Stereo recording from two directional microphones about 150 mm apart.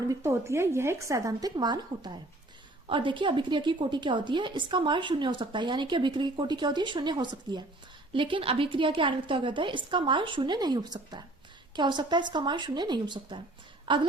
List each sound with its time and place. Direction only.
0.1 s a woman's voice: 20° right (ahead or behind)